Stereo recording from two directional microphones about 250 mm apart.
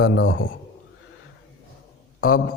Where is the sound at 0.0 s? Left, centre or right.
Left.